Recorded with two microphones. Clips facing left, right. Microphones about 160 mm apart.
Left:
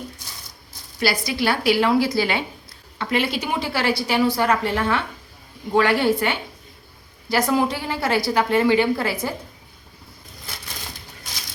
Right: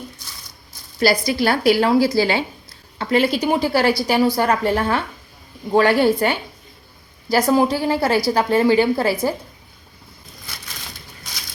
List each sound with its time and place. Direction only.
0.9 s a woman's voice: 40° right (ahead or behind)